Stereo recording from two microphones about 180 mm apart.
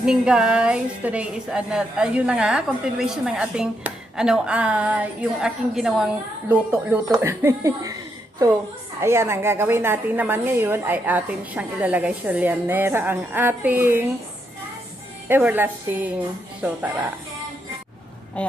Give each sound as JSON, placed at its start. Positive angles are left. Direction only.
{"t": 0.0, "sound": "a woman's voice", "side_deg": -5}
{"t": 9.0, "sound": "a woman's voice", "side_deg": -15}
{"t": 15.3, "sound": "a woman's voice", "side_deg": -10}